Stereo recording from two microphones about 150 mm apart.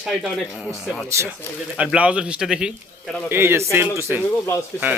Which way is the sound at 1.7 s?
10° right (ahead or behind).